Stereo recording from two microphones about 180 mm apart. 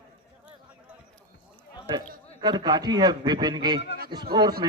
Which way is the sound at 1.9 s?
25° right (ahead or behind).